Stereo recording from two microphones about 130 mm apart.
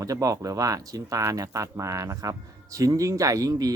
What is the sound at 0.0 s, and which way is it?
Speech, 25° right (ahead or behind).